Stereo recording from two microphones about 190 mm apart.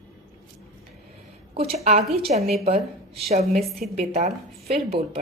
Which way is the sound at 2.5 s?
35° right (ahead or behind).